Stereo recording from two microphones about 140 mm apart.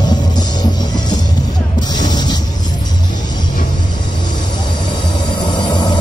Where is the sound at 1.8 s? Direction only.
30° left (ahead or behind).